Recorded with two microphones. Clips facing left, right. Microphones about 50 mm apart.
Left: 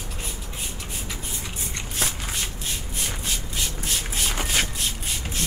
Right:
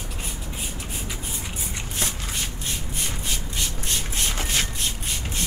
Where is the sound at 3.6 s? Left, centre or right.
Centre.